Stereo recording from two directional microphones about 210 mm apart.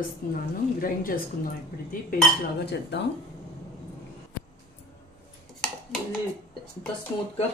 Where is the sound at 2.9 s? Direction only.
55° left (ahead or behind).